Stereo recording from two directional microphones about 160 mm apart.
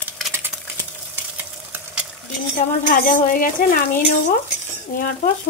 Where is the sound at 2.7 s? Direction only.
55° left (ahead or behind).